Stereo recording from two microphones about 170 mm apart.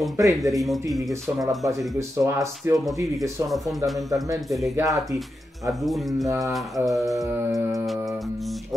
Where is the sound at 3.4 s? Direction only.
Centre (ahead or behind).